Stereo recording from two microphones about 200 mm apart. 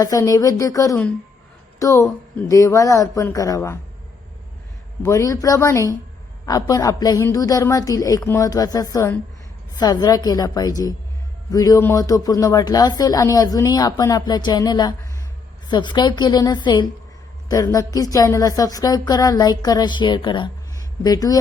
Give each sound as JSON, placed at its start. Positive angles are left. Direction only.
{"t": 0.0, "sound": "a man's voice", "side_deg": 15}
{"t": 5.0, "sound": "a man's voice", "side_deg": 15}